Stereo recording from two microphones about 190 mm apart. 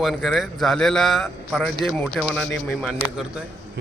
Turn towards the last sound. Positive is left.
turn(degrees=5)  # may be behind; listen again after turning